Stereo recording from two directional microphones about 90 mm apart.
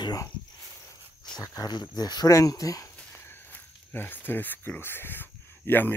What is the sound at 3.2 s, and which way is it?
Speech, 25° left (ahead or behind).